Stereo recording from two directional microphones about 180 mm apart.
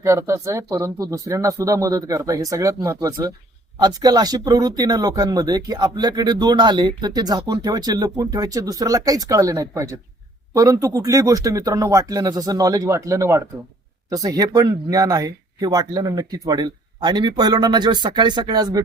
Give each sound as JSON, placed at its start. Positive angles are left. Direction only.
{"t": 0.0, "sound": "speech", "side_deg": -15}